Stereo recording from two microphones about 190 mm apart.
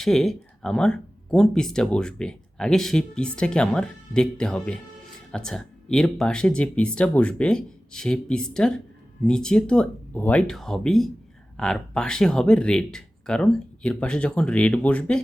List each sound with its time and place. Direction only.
0.0 s speech: centre (ahead or behind)